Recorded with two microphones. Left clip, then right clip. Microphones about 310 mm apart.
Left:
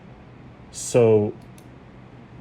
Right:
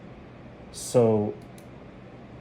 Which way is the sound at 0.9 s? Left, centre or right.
Left.